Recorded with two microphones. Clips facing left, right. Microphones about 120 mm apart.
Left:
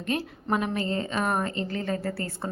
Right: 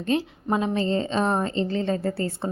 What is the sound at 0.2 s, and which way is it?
A woman's voice, 20° right (ahead or behind).